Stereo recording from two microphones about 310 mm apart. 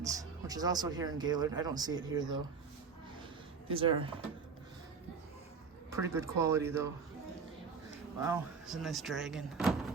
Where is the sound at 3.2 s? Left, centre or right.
Centre.